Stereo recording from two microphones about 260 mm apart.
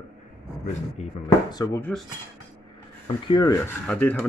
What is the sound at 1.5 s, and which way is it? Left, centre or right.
Speech, centre.